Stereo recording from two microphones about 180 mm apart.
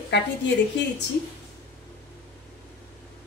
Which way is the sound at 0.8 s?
75° left (ahead or behind).